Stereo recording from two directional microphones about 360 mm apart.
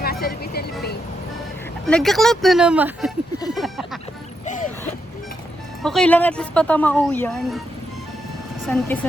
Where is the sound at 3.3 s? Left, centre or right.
Centre.